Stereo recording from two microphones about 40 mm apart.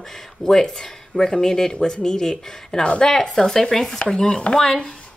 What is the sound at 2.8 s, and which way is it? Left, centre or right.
Speech, left.